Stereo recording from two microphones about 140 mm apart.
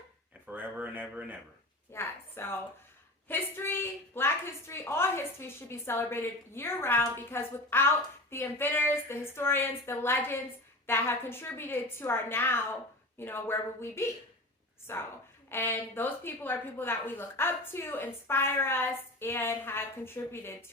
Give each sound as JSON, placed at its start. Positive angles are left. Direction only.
{"t": 0.4, "sound": "speech", "side_deg": -10}
{"t": 1.9, "sound": "a woman's voice", "side_deg": 15}